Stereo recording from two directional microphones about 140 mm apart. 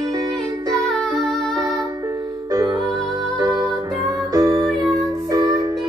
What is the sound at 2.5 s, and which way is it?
Music, 25° right (ahead or behind).